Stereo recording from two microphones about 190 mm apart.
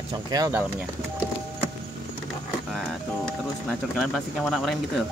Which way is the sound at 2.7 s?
5° left (ahead or behind).